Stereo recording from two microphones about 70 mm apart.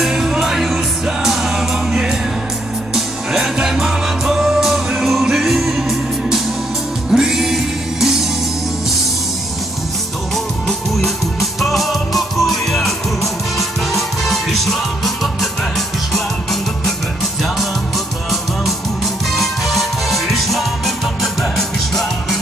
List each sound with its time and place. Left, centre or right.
0.0 s music: centre
10.3 s music: centre
19.3 s music: centre